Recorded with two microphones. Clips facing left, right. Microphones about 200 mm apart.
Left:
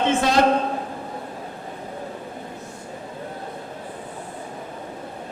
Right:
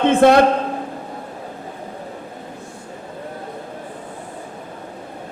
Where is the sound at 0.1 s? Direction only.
55° right (ahead or behind).